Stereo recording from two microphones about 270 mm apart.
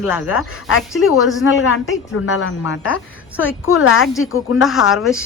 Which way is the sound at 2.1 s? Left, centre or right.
Left.